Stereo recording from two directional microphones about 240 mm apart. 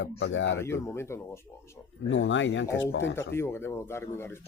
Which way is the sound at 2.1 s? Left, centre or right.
Left.